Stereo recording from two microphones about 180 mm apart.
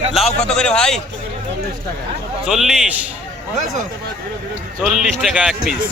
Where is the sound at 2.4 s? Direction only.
Centre (ahead or behind).